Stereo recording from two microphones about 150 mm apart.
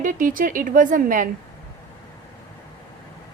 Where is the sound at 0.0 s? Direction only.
65° right (ahead or behind).